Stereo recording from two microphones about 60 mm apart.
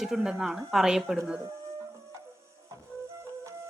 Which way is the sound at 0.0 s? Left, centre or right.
Centre.